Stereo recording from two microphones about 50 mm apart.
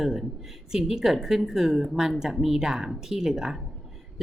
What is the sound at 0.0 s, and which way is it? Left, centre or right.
Speech, centre.